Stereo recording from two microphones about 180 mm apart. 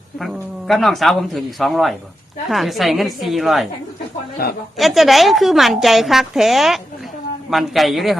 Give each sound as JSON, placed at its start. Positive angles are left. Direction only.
{"t": 0.2, "sound": "a woman's voice", "side_deg": 0}
{"t": 4.8, "sound": "a woman's voice", "side_deg": 0}